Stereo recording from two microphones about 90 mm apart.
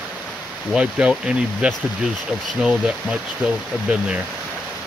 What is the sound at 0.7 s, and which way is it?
Speech, 10° right (ahead or behind).